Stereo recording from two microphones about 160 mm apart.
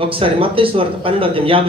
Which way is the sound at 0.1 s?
35° right (ahead or behind).